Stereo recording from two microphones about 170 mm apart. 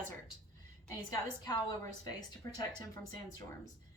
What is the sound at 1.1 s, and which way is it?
A woman's voice, 20° left (ahead or behind).